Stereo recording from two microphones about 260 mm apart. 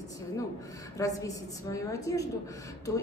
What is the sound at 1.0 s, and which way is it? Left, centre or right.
Speech, centre.